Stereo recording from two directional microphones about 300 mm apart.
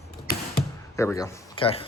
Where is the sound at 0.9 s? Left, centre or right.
Centre.